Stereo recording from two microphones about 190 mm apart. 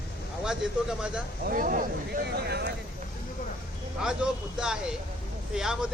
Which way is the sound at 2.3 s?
60° right (ahead or behind).